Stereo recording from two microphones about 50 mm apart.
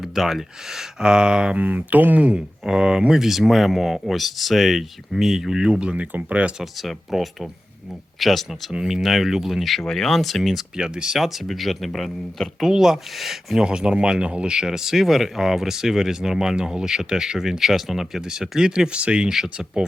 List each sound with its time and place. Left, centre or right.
0.0 s speech: centre
1.5 s speech: right
2.6 s speech: centre
6.6 s speech: centre
10.8 s speech: centre
11.2 s speech: centre; by 19.3 s right